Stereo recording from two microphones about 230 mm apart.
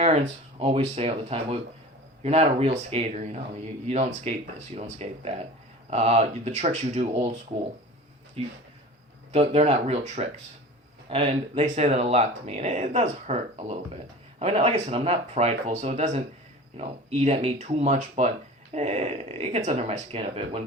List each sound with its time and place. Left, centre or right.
0.6 s speech: right
8.4 s speech: right